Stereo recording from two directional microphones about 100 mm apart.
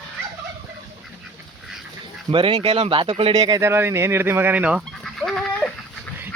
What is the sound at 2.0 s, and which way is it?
Speech, 60° right (ahead or behind).